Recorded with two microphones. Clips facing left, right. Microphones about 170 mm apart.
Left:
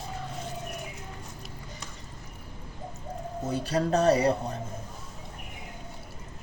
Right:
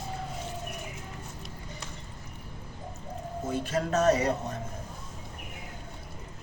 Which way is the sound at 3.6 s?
35° left (ahead or behind).